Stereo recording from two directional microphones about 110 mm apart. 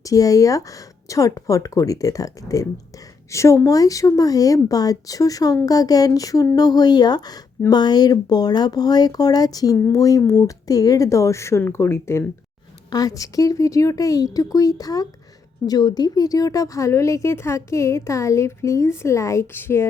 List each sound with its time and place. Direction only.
0.0 s speech: 30° left (ahead or behind)
12.9 s speech: 35° left (ahead or behind)